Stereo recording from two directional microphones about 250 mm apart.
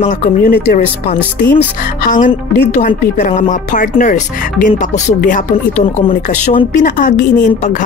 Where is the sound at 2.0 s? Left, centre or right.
Left.